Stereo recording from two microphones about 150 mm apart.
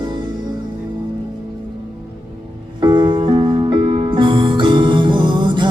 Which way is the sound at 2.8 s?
30° right (ahead or behind).